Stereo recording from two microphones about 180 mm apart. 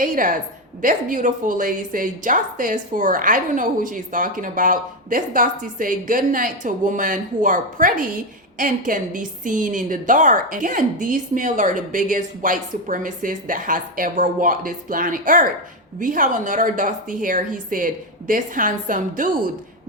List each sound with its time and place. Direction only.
0.0 s a woman's voice: 50° right (ahead or behind)